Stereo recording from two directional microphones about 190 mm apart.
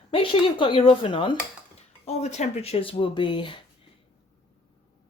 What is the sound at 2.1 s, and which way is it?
Speech, 35° left (ahead or behind).